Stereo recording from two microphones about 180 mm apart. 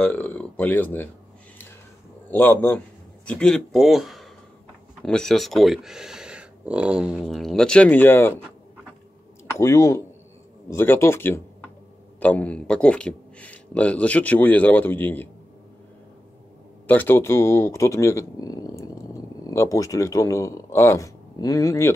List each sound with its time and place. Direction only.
0.0 s speech: 10° left (ahead or behind)
2.3 s speech: 10° left (ahead or behind)
9.6 s speech: 15° left (ahead or behind)
16.8 s speech: 10° left (ahead or behind)